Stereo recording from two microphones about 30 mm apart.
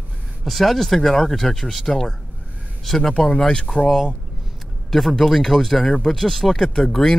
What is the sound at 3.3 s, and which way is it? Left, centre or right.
Speech, left.